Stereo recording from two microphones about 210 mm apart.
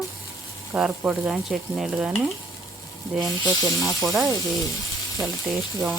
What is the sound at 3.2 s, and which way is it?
Speech, 15° right (ahead or behind).